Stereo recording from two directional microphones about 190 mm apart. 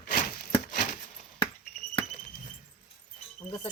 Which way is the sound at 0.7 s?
45° left (ahead or behind).